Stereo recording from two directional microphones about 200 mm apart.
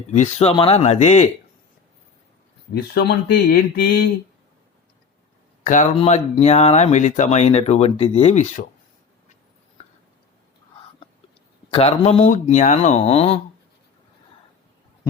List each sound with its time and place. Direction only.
0.1 s speech: 35° left (ahead or behind)
2.7 s speech: 55° left (ahead or behind)
5.6 s speech: 40° left (ahead or behind)
11.7 s speech: 30° left (ahead or behind)